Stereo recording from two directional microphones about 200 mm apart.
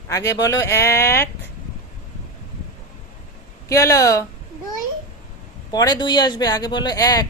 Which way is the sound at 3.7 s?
15° left (ahead or behind).